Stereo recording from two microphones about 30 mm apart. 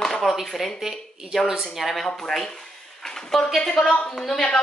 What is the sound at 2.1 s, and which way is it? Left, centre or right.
Speech, centre.